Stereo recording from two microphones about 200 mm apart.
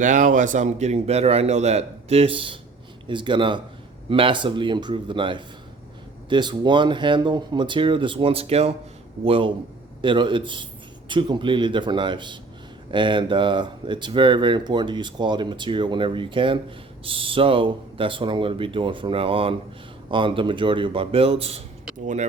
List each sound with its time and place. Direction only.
0.0 s speech: 40° right (ahead or behind)